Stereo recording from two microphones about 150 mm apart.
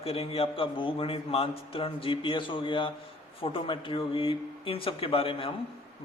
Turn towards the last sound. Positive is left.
turn(degrees=35)  # may be behind; listen again after turning